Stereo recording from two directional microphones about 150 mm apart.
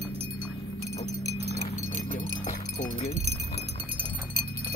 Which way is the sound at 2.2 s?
55° left (ahead or behind).